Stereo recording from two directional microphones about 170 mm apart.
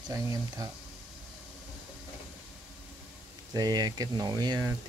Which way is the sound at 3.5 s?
25° right (ahead or behind).